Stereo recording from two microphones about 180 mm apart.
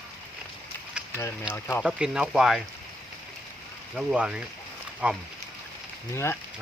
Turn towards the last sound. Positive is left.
turn(degrees=15)  # may be behind; listen again after turning